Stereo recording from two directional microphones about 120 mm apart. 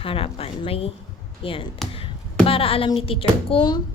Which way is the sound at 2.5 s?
50° left (ahead or behind).